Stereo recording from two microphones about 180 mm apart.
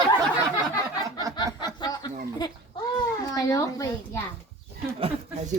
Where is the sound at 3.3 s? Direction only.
20° left (ahead or behind).